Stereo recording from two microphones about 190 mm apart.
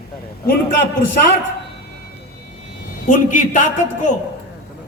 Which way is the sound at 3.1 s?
40° left (ahead or behind).